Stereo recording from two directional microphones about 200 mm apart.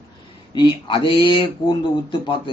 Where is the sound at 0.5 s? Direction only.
25° left (ahead or behind).